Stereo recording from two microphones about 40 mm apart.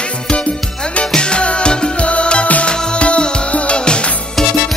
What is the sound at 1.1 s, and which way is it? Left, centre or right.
Music, left.